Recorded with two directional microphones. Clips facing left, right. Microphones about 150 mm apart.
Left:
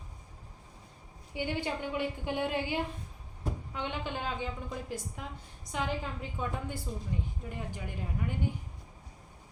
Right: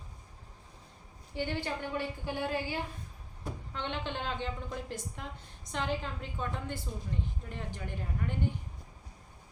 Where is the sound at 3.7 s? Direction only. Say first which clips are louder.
Right 1 dB; 10° left (ahead or behind).